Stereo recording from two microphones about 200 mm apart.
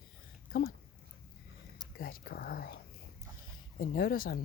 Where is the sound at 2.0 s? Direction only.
45° left (ahead or behind).